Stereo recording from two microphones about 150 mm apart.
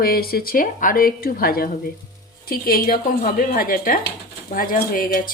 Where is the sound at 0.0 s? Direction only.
90° left.